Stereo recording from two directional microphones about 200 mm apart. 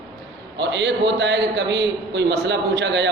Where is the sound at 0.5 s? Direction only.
60° right (ahead or behind).